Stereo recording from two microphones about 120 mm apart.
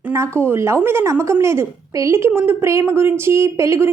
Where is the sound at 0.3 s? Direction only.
20° right (ahead or behind).